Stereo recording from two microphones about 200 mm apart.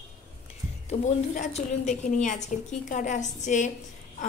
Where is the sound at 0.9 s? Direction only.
35° left (ahead or behind).